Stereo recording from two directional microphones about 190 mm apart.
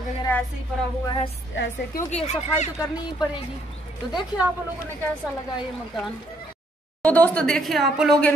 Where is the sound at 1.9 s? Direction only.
35° left (ahead or behind).